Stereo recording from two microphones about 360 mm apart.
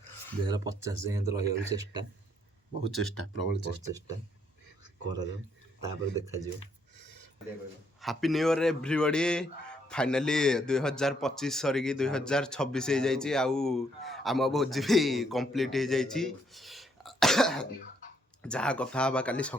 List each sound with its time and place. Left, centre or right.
0.4 s speech: centre
2.9 s speech: left
5.8 s speech: centre
8.0 s speech: centre